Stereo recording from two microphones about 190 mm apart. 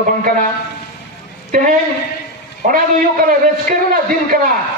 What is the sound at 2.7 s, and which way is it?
A man's voice, 45° right (ahead or behind).